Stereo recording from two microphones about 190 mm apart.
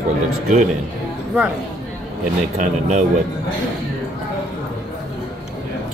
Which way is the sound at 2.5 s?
40° right (ahead or behind).